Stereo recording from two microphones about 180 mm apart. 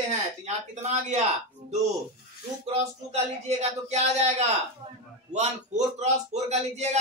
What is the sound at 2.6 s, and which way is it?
Speech, 35° right (ahead or behind).